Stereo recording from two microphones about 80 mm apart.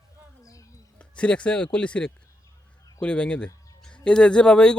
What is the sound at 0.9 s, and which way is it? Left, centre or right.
Speech, centre.